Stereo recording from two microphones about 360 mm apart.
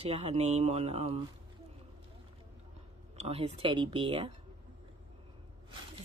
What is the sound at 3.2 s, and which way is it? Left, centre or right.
Speech, centre.